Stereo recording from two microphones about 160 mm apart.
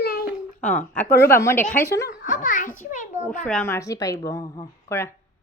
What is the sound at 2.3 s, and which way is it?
A child's voice, 55° left (ahead or behind).